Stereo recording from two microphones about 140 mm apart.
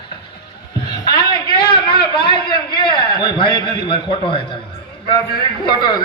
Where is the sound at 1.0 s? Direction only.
30° left (ahead or behind).